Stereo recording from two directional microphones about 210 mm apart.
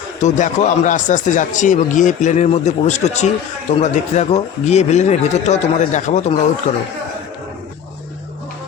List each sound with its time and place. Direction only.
0.2 s speech: 35° left (ahead or behind)